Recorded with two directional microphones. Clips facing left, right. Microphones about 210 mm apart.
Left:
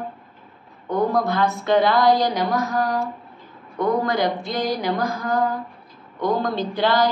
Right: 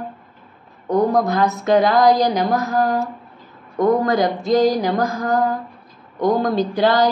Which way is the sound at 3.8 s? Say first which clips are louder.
Right 4 dB; 45° right (ahead or behind).